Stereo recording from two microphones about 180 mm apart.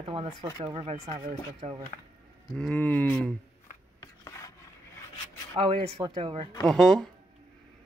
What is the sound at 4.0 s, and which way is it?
Filing, 20° left (ahead or behind).